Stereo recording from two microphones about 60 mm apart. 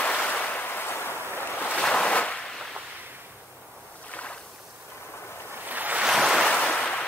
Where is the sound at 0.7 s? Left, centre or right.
Left.